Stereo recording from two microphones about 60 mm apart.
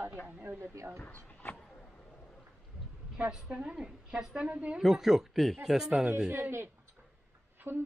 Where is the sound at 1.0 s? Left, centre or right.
Left.